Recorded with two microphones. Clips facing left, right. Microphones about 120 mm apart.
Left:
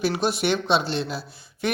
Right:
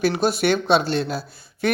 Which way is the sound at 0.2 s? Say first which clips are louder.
Right 3 dB; 45° right (ahead or behind).